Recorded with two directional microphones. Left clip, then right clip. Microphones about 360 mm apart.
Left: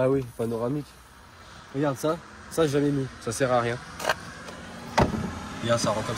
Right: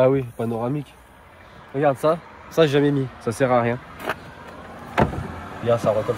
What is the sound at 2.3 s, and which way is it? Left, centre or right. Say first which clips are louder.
Speech: right 6 dB; centre.